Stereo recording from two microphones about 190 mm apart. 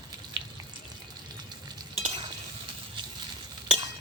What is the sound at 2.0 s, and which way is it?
Stir, 30° right (ahead or behind).